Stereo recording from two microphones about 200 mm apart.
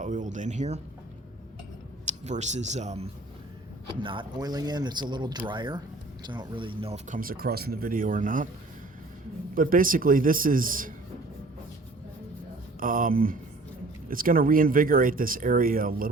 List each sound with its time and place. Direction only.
0.0 s speech: 40° right (ahead or behind)
2.0 s speech: 35° right (ahead or behind)
9.6 s speech: 45° right (ahead or behind)
12.8 s speech: 45° right (ahead or behind)